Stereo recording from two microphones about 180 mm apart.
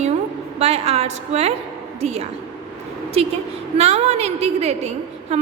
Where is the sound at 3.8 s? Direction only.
35° right (ahead or behind).